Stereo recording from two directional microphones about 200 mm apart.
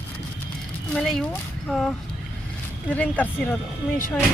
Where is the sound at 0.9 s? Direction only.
Centre (ahead or behind).